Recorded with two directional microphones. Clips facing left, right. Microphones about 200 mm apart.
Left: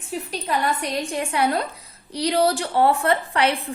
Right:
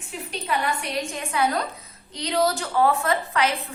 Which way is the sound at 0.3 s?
35° left (ahead or behind).